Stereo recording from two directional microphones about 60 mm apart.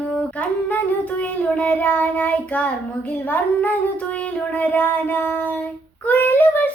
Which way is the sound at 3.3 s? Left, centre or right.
Left.